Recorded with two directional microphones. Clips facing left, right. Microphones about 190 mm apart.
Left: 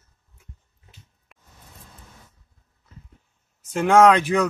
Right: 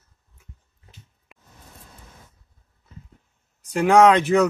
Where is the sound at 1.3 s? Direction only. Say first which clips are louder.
Right 4 dB; centre (ahead or behind).